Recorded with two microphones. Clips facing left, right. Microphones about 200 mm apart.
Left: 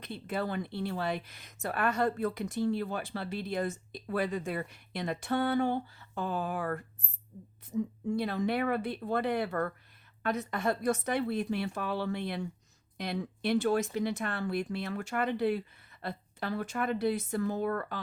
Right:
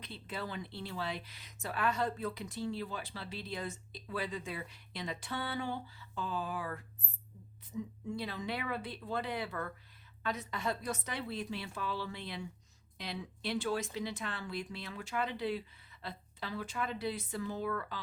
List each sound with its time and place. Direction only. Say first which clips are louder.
0.0 s speech: left 8 dB; 55° left (ahead or behind)